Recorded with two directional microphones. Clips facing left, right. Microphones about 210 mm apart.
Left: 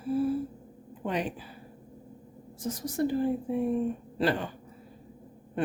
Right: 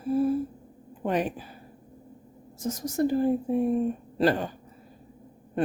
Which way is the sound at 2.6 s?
45° right (ahead or behind).